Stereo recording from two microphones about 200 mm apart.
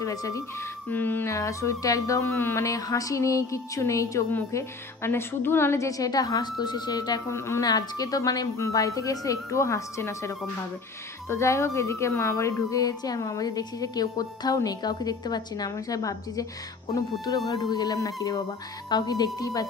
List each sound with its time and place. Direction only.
0.0 s speech: 15° left (ahead or behind)
17.5 s speech: 20° left (ahead or behind)